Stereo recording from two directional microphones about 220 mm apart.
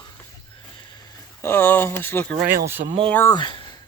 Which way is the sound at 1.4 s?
10° left (ahead or behind).